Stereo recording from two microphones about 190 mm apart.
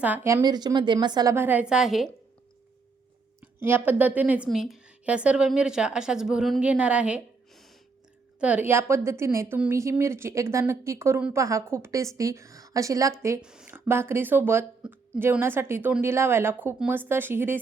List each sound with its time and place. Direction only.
0.0 s a woman's voice: 10° right (ahead or behind)
3.4 s a woman's voice: 10° right (ahead or behind)
13.4 s a woman's voice: 5° right (ahead or behind)